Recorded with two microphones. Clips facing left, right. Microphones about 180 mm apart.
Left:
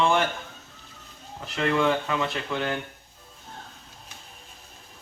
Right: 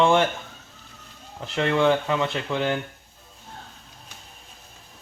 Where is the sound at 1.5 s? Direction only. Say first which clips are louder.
Right 3 dB; 25° right (ahead or behind).